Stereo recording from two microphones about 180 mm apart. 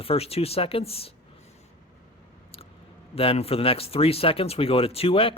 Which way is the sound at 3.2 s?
30° left (ahead or behind).